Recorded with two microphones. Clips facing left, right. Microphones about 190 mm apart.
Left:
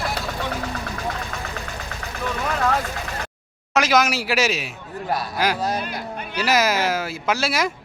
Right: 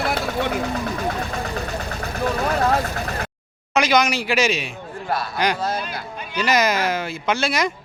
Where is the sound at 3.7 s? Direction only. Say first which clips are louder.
Right 1 dB; centre (ahead or behind).